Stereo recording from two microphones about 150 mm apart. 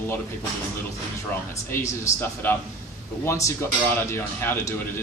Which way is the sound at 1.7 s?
15° left (ahead or behind).